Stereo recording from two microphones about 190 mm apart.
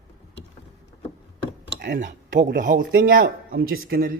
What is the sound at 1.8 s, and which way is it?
Speech, 50° right (ahead or behind).